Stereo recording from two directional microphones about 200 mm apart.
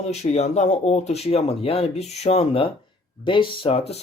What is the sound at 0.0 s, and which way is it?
Speech, 35° left (ahead or behind).